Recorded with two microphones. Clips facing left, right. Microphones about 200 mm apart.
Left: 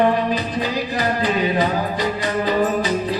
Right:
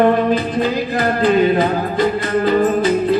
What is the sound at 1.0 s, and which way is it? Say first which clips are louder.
Music: right 7 dB; 55° right (ahead or behind).